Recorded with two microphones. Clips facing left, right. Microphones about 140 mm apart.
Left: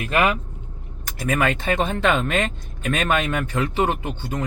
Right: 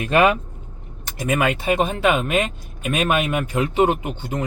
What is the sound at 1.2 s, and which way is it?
Speech, 15° right (ahead or behind).